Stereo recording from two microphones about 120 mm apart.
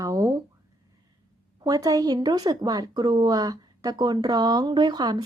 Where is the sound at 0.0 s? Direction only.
30° right (ahead or behind).